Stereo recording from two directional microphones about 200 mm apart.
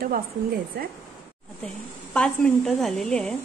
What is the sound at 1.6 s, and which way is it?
A woman's voice, 5° left (ahead or behind).